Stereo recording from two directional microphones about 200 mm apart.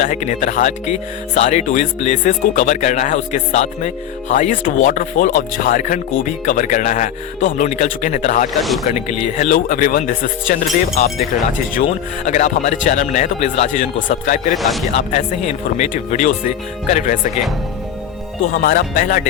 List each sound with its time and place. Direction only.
0.0 s speech: 35° left (ahead or behind)
14.5 s speech: centre (ahead or behind)
14.9 s speech: 35° left (ahead or behind)
18.5 s speech: 45° left (ahead or behind)